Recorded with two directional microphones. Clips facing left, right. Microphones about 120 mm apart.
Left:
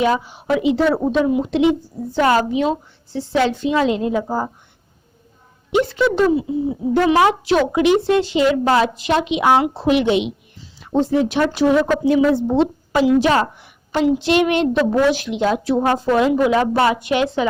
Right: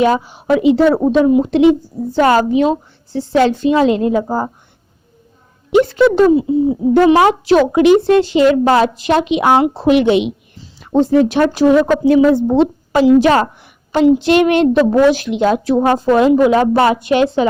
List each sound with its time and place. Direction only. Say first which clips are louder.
0.0 s a woman's voice: right 4 dB; 45° right (ahead or behind)
5.7 s a woman's voice: right 6 dB; 45° right (ahead or behind)
13.9 s a woman's voice: right 5 dB; 45° right (ahead or behind)